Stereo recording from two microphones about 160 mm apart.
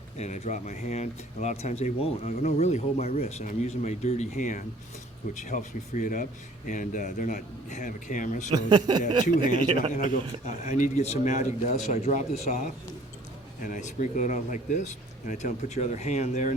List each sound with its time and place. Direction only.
0.2 s speech: 45° left (ahead or behind)
8.5 s speech: 25° right (ahead or behind)
9.2 s speech: 55° left (ahead or behind)